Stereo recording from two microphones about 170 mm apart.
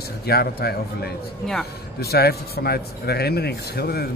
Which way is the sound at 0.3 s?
65° left (ahead or behind).